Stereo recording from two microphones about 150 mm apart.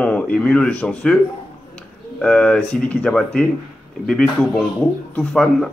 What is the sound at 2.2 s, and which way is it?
Speech, 5° left (ahead or behind).